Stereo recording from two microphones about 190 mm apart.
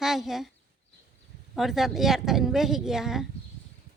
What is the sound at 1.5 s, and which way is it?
A woman's voice, centre (ahead or behind).